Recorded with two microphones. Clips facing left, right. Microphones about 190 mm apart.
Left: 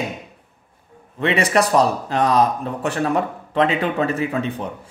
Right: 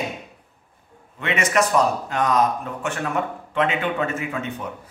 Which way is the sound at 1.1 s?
35° left (ahead or behind).